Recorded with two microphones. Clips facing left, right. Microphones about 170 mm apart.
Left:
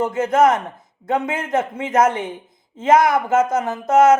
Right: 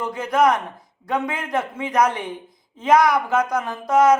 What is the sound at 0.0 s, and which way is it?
A man's voice, 25° left (ahead or behind).